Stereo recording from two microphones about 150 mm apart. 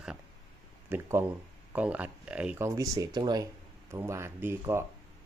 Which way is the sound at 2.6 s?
25° right (ahead or behind).